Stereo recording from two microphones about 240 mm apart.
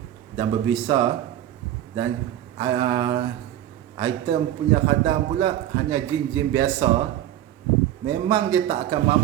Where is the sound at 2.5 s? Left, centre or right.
Centre.